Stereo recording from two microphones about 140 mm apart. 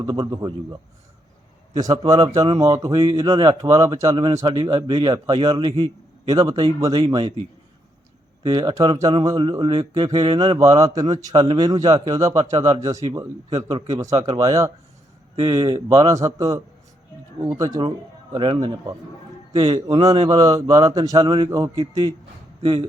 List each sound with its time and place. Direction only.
0.0 s speech: 30° right (ahead or behind)
2.0 s speech: 30° right (ahead or behind)
2.9 s a man's voice: 40° right (ahead or behind)
3.2 s speech: 30° right (ahead or behind)
4.4 s a man's voice: 35° right (ahead or behind)
6.2 s a man's voice: 25° right (ahead or behind)
8.4 s a man's voice: 35° right (ahead or behind)
15.9 s a man's voice: 25° right (ahead or behind)
22.6 s a man's voice: 40° right (ahead or behind)